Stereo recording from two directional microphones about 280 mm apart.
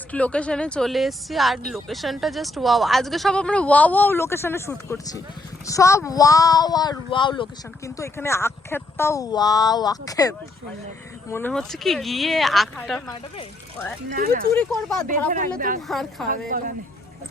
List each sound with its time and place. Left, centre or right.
0.1 s a woman's voice: centre
14.1 s speech: right
14.5 s speech: centre
15.3 s speech: right
15.9 s speech: centre
16.3 s speech: right